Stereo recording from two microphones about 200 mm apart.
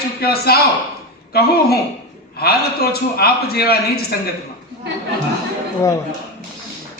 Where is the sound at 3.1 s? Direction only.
50° left (ahead or behind).